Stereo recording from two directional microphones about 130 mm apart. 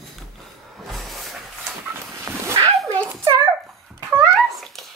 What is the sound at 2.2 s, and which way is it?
Bow-wow, 20° right (ahead or behind).